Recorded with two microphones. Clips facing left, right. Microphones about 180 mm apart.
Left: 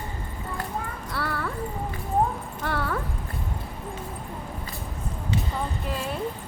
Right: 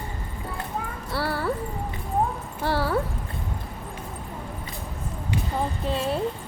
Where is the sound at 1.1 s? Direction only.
30° right (ahead or behind).